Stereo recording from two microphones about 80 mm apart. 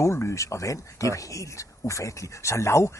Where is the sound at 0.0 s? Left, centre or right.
Left.